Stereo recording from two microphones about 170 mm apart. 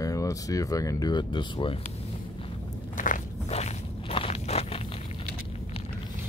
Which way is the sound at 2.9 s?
50° left (ahead or behind).